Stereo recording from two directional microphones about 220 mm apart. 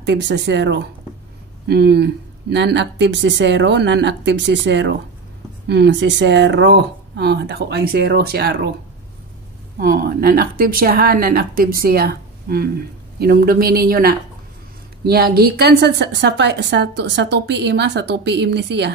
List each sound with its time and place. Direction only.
0.0 s a woman's voice: 50° right (ahead or behind)
9.8 s a woman's voice: 45° right (ahead or behind)